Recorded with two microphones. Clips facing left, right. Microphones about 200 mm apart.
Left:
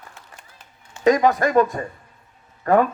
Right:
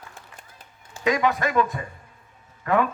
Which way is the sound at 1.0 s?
40° left (ahead or behind).